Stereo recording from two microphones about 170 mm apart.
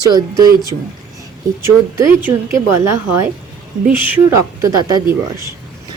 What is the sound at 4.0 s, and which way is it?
Speech, 15° right (ahead or behind).